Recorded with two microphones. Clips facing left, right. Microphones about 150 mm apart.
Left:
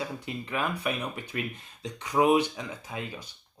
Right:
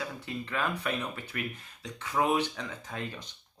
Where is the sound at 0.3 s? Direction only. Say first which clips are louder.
Even; 15° left (ahead or behind).